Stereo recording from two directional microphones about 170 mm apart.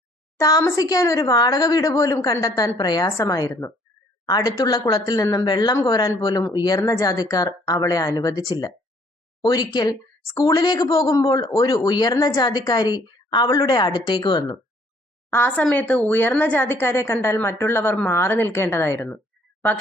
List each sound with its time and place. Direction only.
0.3 s speech: 20° left (ahead or behind)
15.3 s a woman's voice: 10° left (ahead or behind)